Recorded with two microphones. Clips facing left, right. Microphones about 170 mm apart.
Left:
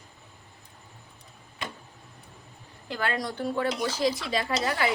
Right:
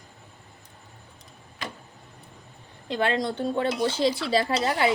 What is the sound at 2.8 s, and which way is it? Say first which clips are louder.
A woman's voice: right 5 dB; 25° right (ahead or behind).